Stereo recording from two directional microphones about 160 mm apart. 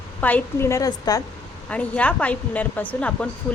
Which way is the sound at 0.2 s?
10° left (ahead or behind).